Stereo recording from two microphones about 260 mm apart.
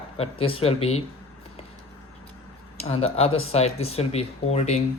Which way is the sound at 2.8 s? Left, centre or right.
Left.